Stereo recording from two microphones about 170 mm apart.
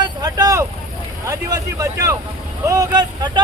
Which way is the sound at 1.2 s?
20° right (ahead or behind).